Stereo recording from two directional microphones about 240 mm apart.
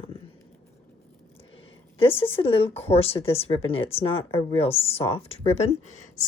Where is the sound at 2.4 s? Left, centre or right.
Left.